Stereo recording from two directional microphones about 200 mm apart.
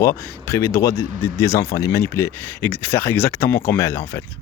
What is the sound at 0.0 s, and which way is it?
Speech, 10° left (ahead or behind).